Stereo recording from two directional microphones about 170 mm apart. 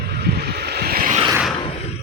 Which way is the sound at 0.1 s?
70° right (ahead or behind).